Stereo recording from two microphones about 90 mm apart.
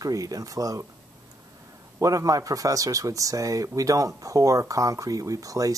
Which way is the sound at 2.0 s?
40° right (ahead or behind).